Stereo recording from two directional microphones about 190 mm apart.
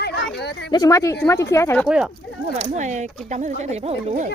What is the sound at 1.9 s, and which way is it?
Speech, 5° right (ahead or behind).